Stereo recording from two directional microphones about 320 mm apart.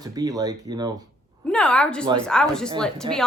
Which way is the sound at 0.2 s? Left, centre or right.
Centre.